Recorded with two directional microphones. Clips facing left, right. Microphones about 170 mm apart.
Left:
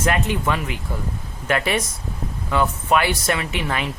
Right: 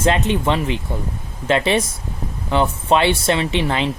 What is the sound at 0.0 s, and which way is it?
Speech, 25° right (ahead or behind).